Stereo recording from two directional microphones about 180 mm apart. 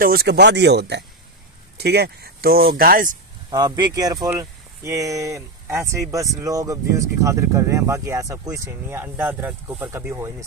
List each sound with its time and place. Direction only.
0.0 s speech: 60° right (ahead or behind)
3.4 s speech: 20° right (ahead or behind)